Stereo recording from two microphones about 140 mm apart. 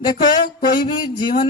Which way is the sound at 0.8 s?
35° left (ahead or behind).